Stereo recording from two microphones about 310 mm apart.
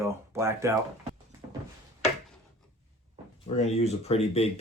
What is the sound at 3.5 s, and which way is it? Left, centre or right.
Speech, centre.